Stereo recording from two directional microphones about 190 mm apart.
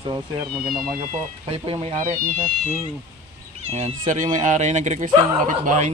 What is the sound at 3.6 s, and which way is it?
Speech, 35° right (ahead or behind).